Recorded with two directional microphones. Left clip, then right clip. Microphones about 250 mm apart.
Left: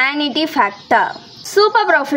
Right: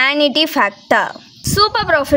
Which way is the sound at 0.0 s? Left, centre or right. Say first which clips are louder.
Right 3 dB; right.